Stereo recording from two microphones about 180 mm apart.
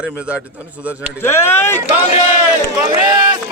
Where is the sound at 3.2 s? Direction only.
25° right (ahead or behind).